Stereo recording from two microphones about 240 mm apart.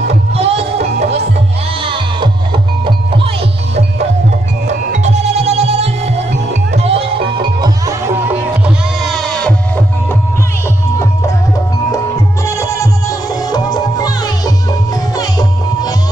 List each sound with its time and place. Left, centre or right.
0.4 s music: right
4.6 s music: right
8.6 s music: centre
12.4 s music: centre